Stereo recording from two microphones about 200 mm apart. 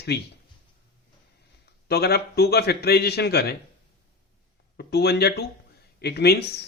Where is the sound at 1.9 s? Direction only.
55° left (ahead or behind).